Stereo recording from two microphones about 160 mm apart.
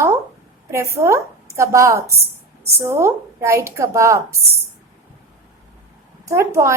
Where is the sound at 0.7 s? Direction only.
15° right (ahead or behind).